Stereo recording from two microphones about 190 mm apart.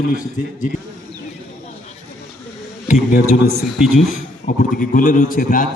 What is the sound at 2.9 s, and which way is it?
Speech, 40° left (ahead or behind).